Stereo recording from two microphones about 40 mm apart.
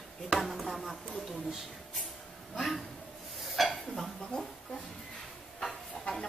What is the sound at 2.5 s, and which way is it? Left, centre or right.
Speech, centre.